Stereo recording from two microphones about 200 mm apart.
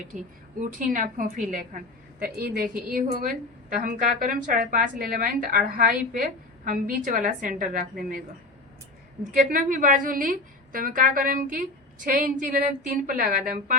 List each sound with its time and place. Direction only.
0.1 s a woman's voice: 40° right (ahead or behind)
9.3 s a woman's voice: 40° right (ahead or behind)